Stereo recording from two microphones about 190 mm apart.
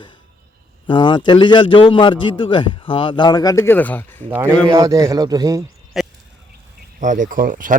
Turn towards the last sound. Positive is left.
turn(degrees=-45)  # may be behind; listen again after turning